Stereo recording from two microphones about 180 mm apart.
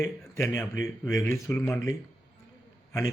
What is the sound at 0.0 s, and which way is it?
Speech, 15° left (ahead or behind).